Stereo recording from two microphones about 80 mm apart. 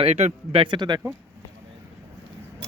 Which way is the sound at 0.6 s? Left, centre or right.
Right.